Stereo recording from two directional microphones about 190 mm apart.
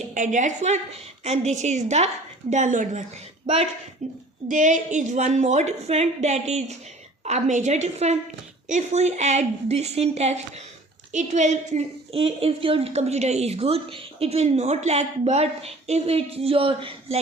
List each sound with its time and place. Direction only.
0.1 s a woman's voice: 40° right (ahead or behind)